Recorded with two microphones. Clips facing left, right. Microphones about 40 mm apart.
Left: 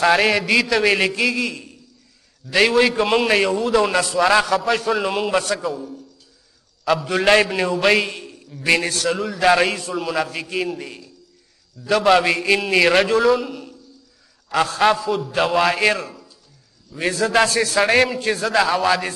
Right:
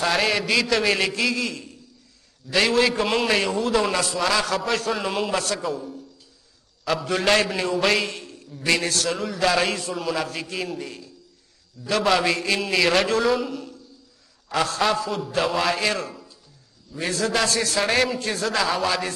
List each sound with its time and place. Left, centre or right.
0.1 s a man's voice: centre
16.0 s a sound: centre
16.9 s a man's voice: centre
17.6 s a man's voice: centre